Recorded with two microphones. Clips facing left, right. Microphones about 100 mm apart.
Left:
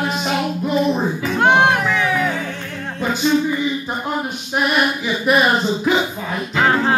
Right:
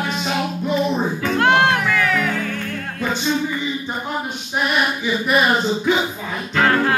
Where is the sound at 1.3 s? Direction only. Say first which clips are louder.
Left 2 dB; 15° left (ahead or behind).